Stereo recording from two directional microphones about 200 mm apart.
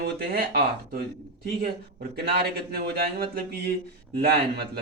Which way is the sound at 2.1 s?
50° right (ahead or behind).